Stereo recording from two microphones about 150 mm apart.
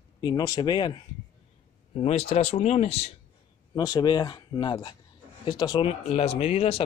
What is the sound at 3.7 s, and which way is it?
Speech, 25° left (ahead or behind).